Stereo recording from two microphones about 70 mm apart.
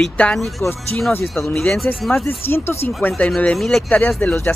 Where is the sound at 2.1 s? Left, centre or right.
Left.